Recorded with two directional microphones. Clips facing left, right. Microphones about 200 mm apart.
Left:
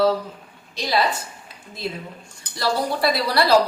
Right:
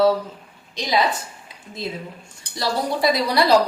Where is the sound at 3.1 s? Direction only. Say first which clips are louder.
Right 2 dB; 20° right (ahead or behind).